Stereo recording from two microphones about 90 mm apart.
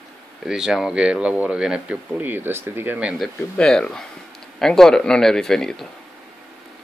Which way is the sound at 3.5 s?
10° left (ahead or behind).